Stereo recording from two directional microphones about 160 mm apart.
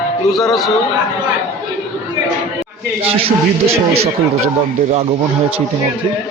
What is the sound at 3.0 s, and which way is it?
Speech, 35° right (ahead or behind).